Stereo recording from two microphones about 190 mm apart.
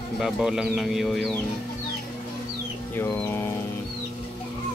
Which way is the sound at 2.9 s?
10° left (ahead or behind).